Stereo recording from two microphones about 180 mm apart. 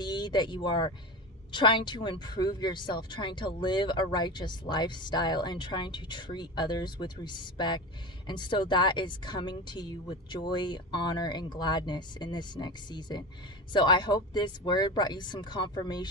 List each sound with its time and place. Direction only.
0.0 s speech: 25° left (ahead or behind)